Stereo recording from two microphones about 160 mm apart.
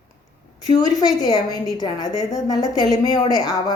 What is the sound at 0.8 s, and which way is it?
Speech, 25° left (ahead or behind).